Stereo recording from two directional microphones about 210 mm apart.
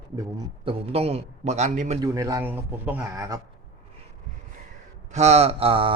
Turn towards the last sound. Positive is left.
turn(degrees=-25)  # may be behind; listen again after turning